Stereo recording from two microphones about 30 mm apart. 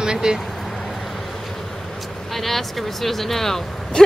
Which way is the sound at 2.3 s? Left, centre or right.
Centre.